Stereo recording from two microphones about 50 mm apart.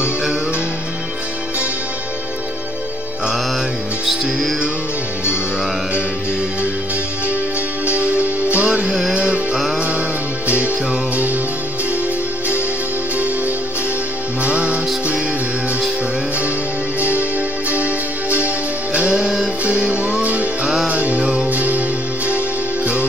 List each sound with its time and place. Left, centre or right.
4.0 s music: centre
8.0 s music: right
14.4 s music: right
17.1 s music: right
19.6 s music: right
21.2 s music: centre
21.5 s music: right